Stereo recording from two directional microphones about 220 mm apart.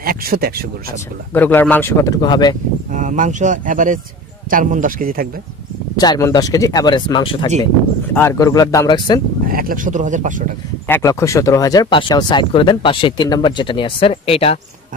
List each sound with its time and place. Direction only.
0.0 s speech: 40° right (ahead or behind)
1.3 s speech: 10° left (ahead or behind)
2.9 s speech: 35° right (ahead or behind)
5.9 s speech: 15° left (ahead or behind)
8.1 s speech: 10° left (ahead or behind)
9.5 s speech: 40° right (ahead or behind)
10.9 s speech: 15° left (ahead or behind)